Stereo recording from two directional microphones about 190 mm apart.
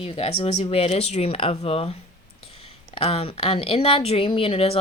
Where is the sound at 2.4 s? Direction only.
30° left (ahead or behind).